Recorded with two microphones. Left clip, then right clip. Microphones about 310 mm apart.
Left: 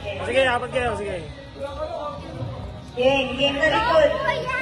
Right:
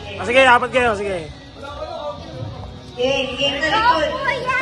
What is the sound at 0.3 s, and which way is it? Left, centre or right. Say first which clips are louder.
Speech: right 8 dB; centre.